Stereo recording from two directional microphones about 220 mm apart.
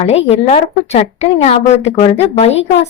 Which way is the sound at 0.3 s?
30° left (ahead or behind).